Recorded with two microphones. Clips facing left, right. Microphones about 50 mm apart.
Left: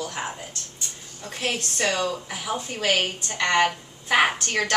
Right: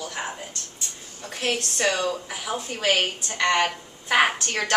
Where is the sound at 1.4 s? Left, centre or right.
Centre.